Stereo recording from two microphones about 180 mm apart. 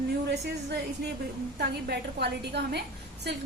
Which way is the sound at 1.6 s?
65° right (ahead or behind).